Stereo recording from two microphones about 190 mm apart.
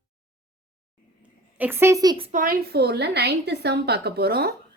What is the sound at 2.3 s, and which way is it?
A woman's voice, 45° right (ahead or behind).